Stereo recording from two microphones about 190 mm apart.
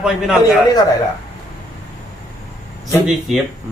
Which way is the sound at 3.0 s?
Centre (ahead or behind).